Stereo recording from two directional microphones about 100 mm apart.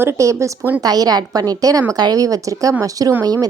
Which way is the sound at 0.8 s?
40° right (ahead or behind).